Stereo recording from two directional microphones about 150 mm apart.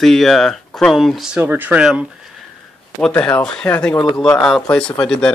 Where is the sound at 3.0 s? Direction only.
5° left (ahead or behind).